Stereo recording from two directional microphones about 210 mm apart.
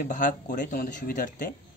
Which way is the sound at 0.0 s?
40° left (ahead or behind).